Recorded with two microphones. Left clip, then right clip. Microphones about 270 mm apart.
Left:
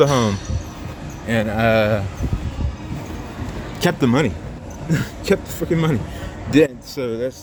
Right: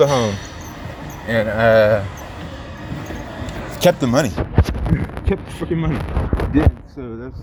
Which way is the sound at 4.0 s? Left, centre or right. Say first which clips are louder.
Right 1 dB; centre.